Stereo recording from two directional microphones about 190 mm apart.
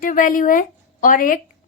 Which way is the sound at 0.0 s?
45° left (ahead or behind).